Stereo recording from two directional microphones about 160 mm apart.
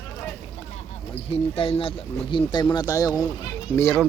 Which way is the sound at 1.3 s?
35° left (ahead or behind).